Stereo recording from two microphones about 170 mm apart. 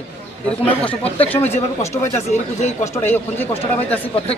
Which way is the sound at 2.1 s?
40° left (ahead or behind).